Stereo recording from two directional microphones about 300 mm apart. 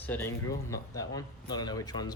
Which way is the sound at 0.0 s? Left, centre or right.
Centre.